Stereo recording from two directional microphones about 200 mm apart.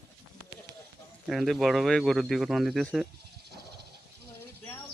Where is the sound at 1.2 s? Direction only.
Centre (ahead or behind).